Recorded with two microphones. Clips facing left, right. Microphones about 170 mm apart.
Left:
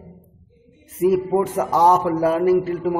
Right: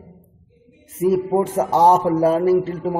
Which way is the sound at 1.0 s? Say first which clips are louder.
Even; 30° right (ahead or behind).